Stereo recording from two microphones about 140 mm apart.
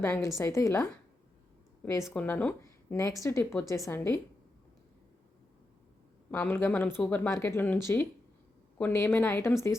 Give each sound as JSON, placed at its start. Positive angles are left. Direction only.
{"t": 0.0, "sound": "a woman's voice", "side_deg": 20}
{"t": 2.1, "sound": "speech", "side_deg": 10}
{"t": 3.0, "sound": "a woman's voice", "side_deg": 20}
{"t": 6.3, "sound": "speech", "side_deg": 15}